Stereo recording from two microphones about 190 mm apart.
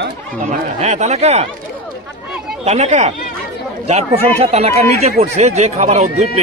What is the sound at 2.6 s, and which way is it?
Speech, 35° right (ahead or behind).